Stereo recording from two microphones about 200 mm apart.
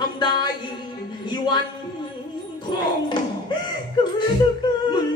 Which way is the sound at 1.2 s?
20° left (ahead or behind).